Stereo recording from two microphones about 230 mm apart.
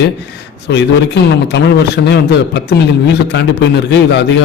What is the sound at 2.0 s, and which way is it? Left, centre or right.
A man's voice, left.